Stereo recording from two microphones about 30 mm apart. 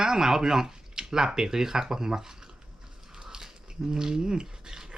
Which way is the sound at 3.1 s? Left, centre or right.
Centre.